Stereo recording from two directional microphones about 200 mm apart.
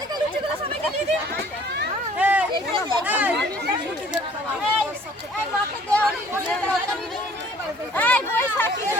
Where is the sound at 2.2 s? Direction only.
10° right (ahead or behind).